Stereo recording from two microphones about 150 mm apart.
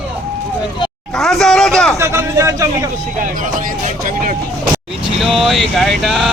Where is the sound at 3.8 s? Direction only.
65° right (ahead or behind).